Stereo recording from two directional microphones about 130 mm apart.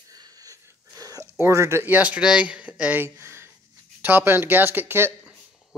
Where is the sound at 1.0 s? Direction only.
25° right (ahead or behind).